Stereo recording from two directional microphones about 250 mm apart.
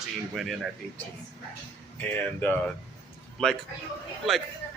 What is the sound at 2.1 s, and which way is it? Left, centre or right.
Speech, centre.